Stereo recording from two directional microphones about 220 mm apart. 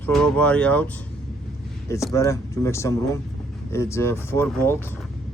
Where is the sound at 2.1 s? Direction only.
15° left (ahead or behind).